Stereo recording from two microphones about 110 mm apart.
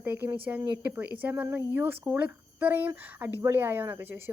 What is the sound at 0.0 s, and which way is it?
A woman's voice, 20° right (ahead or behind).